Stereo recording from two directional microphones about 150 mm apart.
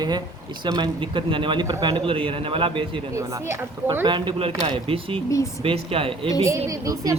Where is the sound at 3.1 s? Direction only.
20° right (ahead or behind).